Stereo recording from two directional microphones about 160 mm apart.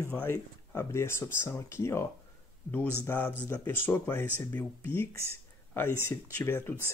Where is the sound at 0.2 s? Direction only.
15° left (ahead or behind).